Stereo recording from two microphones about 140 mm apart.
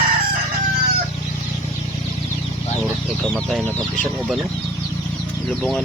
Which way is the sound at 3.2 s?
5° left (ahead or behind).